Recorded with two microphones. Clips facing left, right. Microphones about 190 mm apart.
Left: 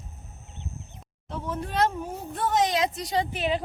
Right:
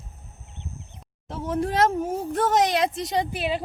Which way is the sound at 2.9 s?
25° right (ahead or behind).